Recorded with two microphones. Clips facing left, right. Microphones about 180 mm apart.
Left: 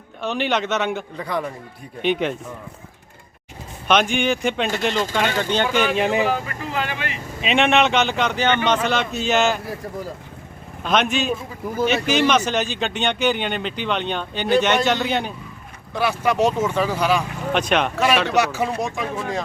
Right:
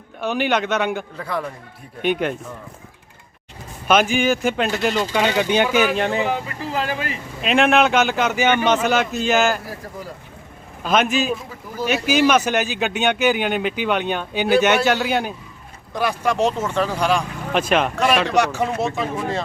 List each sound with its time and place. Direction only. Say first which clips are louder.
0.2 s speech: right 2 dB; 5° right (ahead or behind)
3.8 s speech: right 2 dB; 5° right (ahead or behind)
5.1 s speech: right 3 dB; 15° right (ahead or behind)
6.0 s speech: left 1 dB; 15° left (ahead or behind)
6.7 s speech: right 2 dB; 40° right (ahead or behind)
7.4 s speech: right 2 dB; centre (ahead or behind)
10.8 s speech: right 1 dB; centre (ahead or behind)
16.0 s speech: even; 5° left (ahead or behind)